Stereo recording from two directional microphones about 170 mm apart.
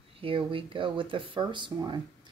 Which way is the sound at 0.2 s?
30° right (ahead or behind).